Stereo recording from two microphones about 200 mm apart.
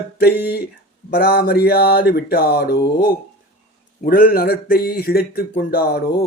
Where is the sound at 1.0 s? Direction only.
50° left (ahead or behind).